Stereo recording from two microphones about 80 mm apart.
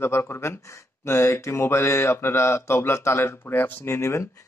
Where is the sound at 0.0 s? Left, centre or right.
Left.